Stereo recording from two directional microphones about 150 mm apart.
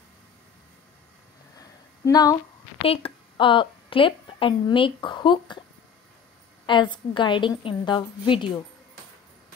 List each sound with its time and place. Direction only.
1.6 s a sound: 25° left (ahead or behind)
2.8 s a woman's voice: 40° left (ahead or behind)
6.6 s a woman's voice: 30° left (ahead or behind)